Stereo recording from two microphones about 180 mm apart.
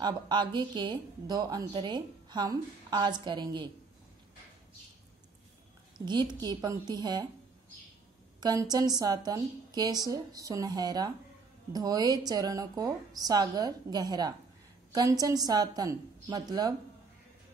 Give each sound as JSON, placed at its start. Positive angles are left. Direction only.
{"t": 0.0, "sound": "a woman's voice", "side_deg": -25}
{"t": 5.9, "sound": "a woman's voice", "side_deg": -25}
{"t": 8.4, "sound": "a woman's voice", "side_deg": -20}